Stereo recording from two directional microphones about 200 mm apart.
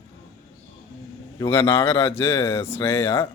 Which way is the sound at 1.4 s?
10° left (ahead or behind).